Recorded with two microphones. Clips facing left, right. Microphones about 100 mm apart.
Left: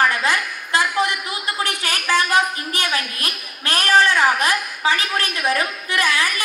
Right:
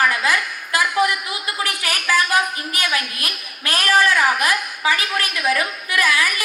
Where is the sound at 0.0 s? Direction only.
30° left (ahead or behind).